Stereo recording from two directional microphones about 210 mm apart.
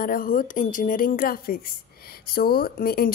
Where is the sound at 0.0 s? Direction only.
40° left (ahead or behind).